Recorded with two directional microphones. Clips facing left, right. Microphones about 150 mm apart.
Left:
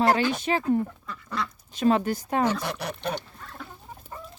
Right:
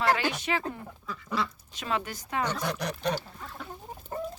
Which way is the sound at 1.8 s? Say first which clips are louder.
Left 10 dB; 40° left (ahead or behind).